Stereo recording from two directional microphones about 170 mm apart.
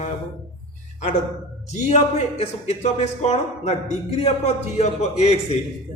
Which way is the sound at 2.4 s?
40° left (ahead or behind).